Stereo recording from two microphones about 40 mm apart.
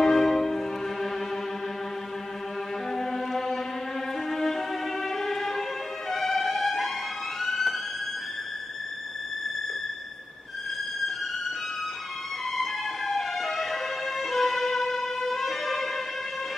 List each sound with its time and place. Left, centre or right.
0.0 s music: centre
2.9 s music: centre
4.3 s violin: centre
7.4 s music: centre
12.5 s music: centre